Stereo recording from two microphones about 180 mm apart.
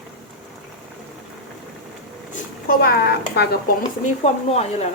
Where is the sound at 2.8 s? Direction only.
60° left (ahead or behind).